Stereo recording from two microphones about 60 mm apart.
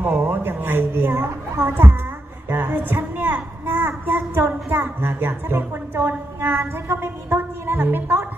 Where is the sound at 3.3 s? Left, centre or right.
Right.